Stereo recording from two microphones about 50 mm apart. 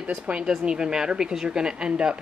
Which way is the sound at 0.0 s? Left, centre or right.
Right.